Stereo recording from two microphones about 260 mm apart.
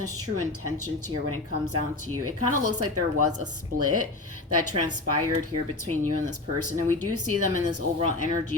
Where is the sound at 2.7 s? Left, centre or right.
Right.